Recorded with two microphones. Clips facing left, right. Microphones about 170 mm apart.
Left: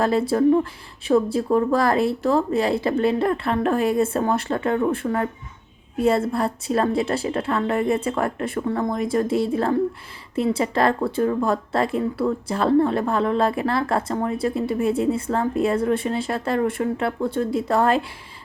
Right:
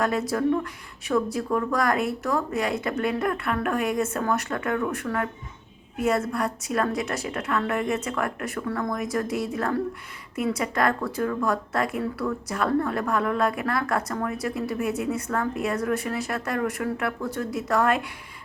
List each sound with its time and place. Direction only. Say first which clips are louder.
0.0 s speech: left 6 dB; 30° left (ahead or behind)